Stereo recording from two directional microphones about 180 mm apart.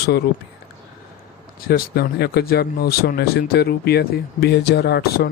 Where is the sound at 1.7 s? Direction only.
60° left (ahead or behind).